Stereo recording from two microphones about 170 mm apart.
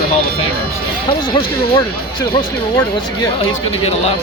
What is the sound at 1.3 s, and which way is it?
Speech, 30° left (ahead or behind).